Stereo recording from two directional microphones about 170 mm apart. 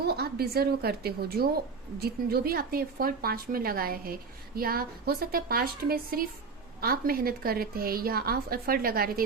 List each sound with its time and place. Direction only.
0.0 s a woman's voice: 70° right (ahead or behind)